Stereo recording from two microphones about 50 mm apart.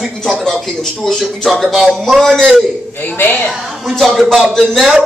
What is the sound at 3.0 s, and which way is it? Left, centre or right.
Speech, left.